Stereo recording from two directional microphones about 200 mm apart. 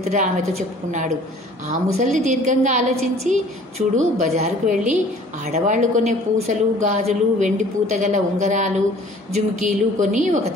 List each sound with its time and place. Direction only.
0.1 s speech: 35° right (ahead or behind)
1.7 s speech: 35° right (ahead or behind)